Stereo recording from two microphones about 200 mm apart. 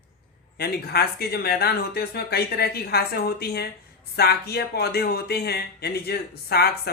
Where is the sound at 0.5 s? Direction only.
50° left (ahead or behind).